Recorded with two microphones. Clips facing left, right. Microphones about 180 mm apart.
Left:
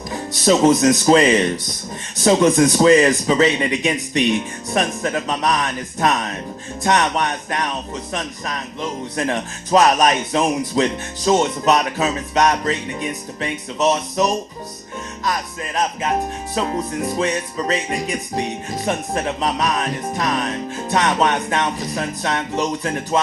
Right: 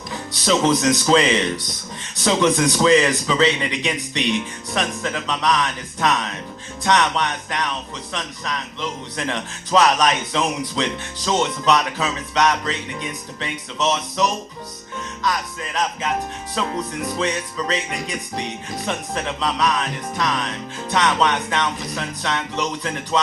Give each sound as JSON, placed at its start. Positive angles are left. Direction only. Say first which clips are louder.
{"t": 0.1, "sound": "music", "louder": "left 4 dB", "side_deg": 40}